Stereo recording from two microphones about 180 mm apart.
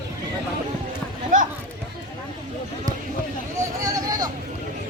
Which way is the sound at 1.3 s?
45° right (ahead or behind).